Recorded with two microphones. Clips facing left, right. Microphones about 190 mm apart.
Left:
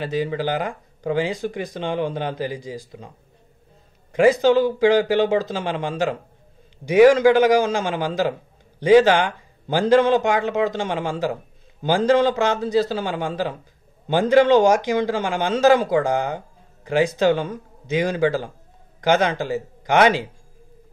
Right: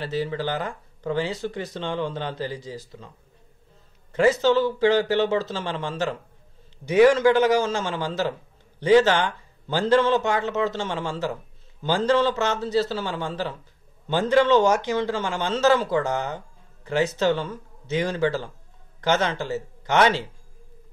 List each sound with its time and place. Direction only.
0.0 s a man's voice: 15° left (ahead or behind)
4.1 s a man's voice: 15° left (ahead or behind)